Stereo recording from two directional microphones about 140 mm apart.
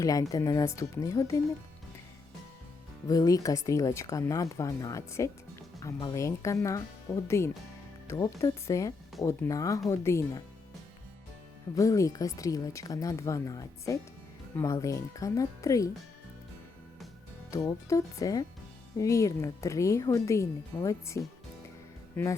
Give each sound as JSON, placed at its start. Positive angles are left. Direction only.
{"t": 0.0, "sound": "speech", "side_deg": 25}
{"t": 3.1, "sound": "speech", "side_deg": 25}
{"t": 11.7, "sound": "speech", "side_deg": 25}
{"t": 17.5, "sound": "speech", "side_deg": 25}